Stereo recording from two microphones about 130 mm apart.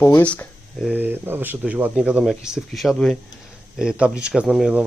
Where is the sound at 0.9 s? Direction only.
15° right (ahead or behind).